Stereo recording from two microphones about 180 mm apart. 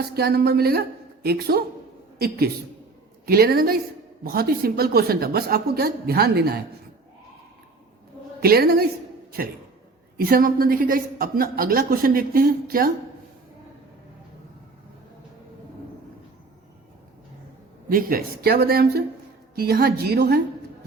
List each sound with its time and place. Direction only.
0.1 s a woman's voice: 60° right (ahead or behind)
8.4 s a woman's voice: 60° right (ahead or behind)
10.2 s a woman's voice: 55° right (ahead or behind)
17.9 s a woman's voice: 55° right (ahead or behind)